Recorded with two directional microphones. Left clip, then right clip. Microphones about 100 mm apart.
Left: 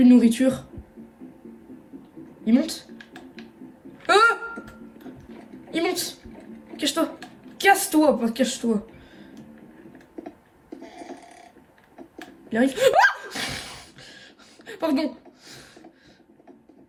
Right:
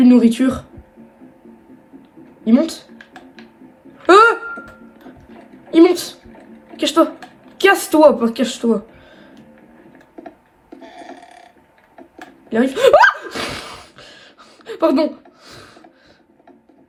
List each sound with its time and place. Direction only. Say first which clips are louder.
0.0 s speech: right 5 dB; 40° right (ahead or behind)
2.4 s speech: right 7 dB; 30° right (ahead or behind)
4.0 s speech: right 8 dB; 30° right (ahead or behind)
5.7 s speech: right 14 dB; 35° right (ahead or behind)
12.5 s a sound: right 8 dB; 45° right (ahead or behind)